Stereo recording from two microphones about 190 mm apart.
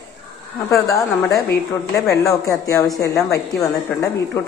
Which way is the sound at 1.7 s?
15° left (ahead or behind).